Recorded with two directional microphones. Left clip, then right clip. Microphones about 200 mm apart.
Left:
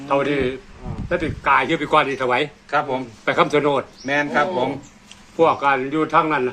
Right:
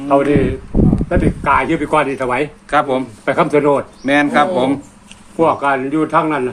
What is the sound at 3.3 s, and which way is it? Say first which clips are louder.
Speech: right 4 dB; 10° right (ahead or behind).